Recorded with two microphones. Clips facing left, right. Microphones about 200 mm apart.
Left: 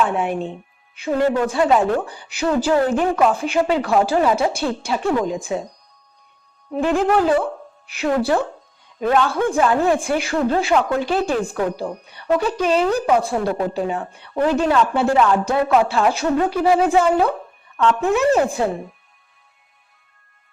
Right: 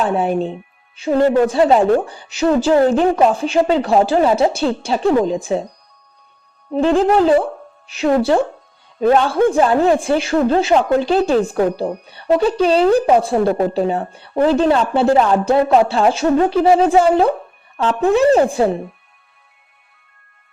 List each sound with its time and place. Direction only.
0.0 s a woman's voice: 35° right (ahead or behind)
6.7 s a woman's voice: 30° right (ahead or behind)